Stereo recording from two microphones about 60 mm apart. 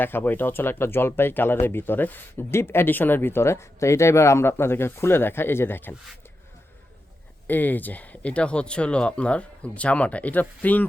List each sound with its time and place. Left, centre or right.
0.0 s speech: left
7.4 s speech: left